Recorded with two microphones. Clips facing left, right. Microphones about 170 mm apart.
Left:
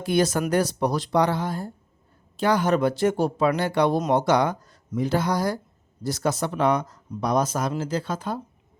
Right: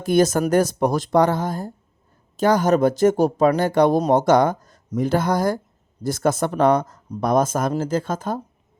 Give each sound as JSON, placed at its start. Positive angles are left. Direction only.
{"t": 0.0, "sound": "speech", "side_deg": -45}